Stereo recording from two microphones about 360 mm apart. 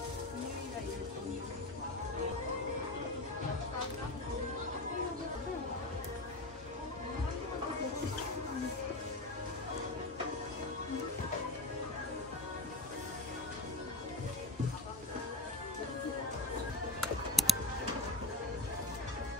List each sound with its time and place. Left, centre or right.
17.4 s music: centre